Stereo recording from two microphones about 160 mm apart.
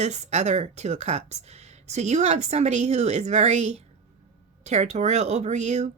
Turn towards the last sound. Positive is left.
turn(degrees=-45)  # may be behind; listen again after turning